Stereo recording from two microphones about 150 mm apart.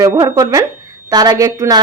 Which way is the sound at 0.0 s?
25° right (ahead or behind).